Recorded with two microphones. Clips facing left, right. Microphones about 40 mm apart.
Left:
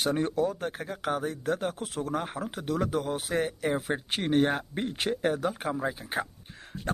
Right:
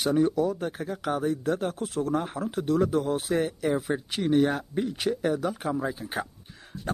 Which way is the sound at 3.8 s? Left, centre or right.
Left.